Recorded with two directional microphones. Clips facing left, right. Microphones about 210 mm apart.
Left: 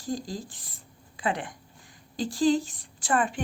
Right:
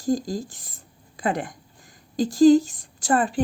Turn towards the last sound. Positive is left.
turn(degrees=-35)  # may be behind; listen again after turning